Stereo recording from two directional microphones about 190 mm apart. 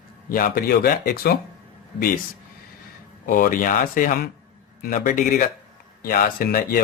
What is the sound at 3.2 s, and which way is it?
A man's voice, 45° left (ahead or behind).